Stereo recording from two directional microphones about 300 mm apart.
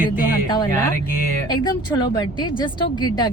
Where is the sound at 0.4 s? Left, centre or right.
Centre.